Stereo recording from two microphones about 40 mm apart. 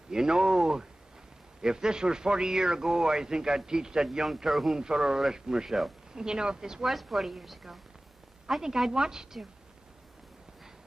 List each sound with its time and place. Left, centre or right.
0.1 s a man's voice: centre
4.7 s a man's voice: centre
6.9 s a woman's voice: centre